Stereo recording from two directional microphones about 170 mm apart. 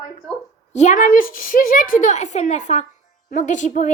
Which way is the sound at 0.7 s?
45° left (ahead or behind).